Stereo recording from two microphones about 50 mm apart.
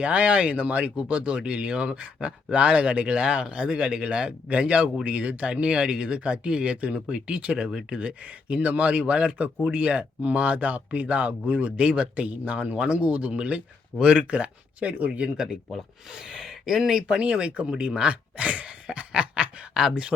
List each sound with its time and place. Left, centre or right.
0.0 s speech: right; by 7.9 s centre
7.9 s speech: right
16.1 s speech: centre
17.2 s speech: centre